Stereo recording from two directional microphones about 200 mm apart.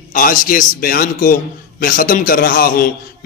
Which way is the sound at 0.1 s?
40° left (ahead or behind).